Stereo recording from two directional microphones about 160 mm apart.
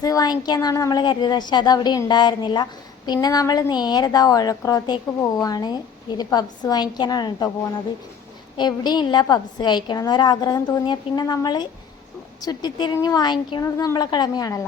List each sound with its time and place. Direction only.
0.0 s a woman's voice: 25° left (ahead or behind)
8.5 s a woman's voice: 25° left (ahead or behind)